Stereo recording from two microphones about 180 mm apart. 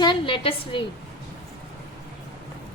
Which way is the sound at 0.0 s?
25° left (ahead or behind).